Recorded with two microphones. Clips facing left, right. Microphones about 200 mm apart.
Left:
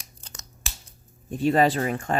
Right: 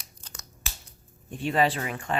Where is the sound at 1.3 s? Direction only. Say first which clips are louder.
Left 5 dB; 40° left (ahead or behind).